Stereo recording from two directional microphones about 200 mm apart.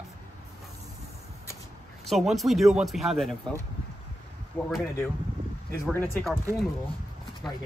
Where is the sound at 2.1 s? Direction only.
Centre (ahead or behind).